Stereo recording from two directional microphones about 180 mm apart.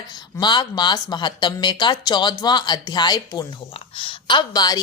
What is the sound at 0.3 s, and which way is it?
A woman's voice, 25° left (ahead or behind).